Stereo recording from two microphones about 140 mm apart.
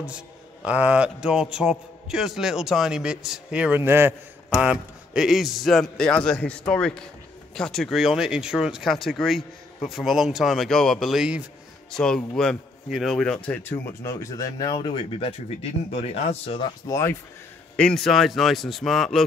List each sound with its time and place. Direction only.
0.0 s a man's voice: 10° right (ahead or behind)
11.9 s speech: 5° left (ahead or behind); by 14.9 s 30° left (ahead or behind)
15.1 s speech: 50° left (ahead or behind)
16.8 s speech: 20° left (ahead or behind)
17.7 s a man's voice: 5° left (ahead or behind)